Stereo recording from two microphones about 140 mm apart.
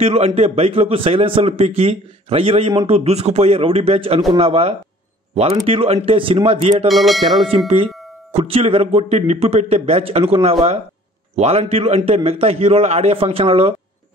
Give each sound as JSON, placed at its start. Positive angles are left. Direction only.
{"t": 0.0, "sound": "a man's voice", "side_deg": -50}
{"t": 6.9, "sound": "music", "side_deg": 0}
{"t": 7.5, "sound": "a man's voice", "side_deg": -40}